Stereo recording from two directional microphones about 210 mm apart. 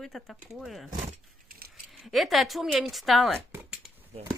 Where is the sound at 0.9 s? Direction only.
30° right (ahead or behind).